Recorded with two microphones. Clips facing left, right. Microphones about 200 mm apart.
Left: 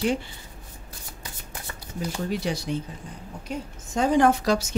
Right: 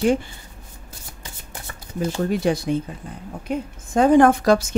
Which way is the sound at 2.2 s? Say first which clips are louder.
Right 7 dB; 50° right (ahead or behind).